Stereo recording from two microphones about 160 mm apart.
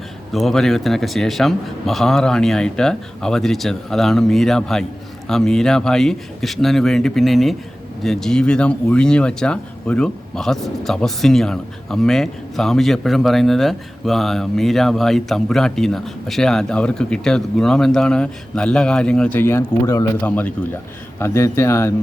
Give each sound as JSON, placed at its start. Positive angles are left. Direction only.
{"t": 0.3, "sound": "speech", "side_deg": 0}